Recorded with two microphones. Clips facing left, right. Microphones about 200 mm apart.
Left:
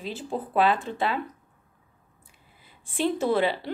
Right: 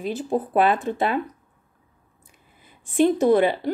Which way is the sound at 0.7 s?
20° right (ahead or behind).